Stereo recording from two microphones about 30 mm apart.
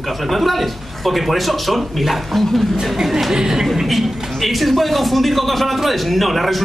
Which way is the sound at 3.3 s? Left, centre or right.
Centre.